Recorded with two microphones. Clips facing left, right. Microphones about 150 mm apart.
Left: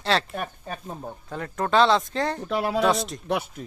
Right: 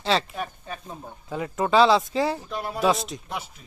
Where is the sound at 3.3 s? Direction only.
60° left (ahead or behind).